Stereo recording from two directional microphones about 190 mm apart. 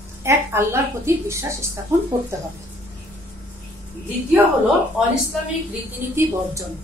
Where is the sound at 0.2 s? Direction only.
15° right (ahead or behind).